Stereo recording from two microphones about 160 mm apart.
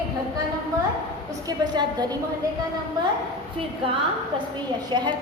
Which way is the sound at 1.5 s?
25° right (ahead or behind).